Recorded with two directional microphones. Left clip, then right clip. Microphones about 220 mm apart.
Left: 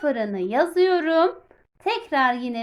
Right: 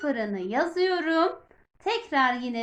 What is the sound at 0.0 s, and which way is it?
A woman's voice, 45° left (ahead or behind).